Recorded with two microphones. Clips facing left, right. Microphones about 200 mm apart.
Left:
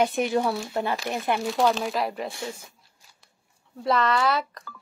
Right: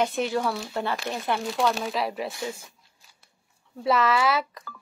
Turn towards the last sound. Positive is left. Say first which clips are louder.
# even
turn(degrees=-5)  # may be behind; listen again after turning